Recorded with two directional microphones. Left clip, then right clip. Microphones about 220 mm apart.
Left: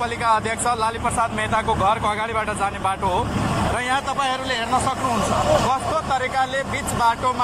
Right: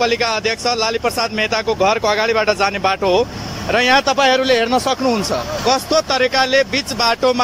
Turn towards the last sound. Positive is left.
turn(degrees=-45)  # may be behind; listen again after turning